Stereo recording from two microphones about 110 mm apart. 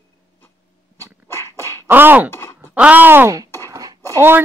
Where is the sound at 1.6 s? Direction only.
20° right (ahead or behind).